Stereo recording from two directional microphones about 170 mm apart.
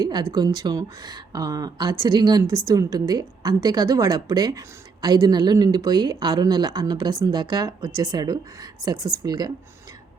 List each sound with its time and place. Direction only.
0.0 s a woman's voice: 25° right (ahead or behind)